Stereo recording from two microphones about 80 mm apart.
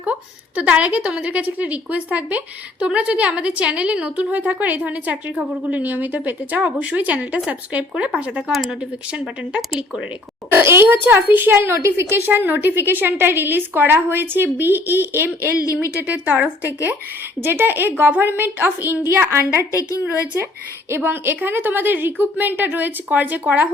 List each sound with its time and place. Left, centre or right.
0.0 s a woman's voice: centre
10.5 s a woman's voice: right
15.5 s speech: left
16.0 s a woman's voice: centre
20.9 s a woman's voice: right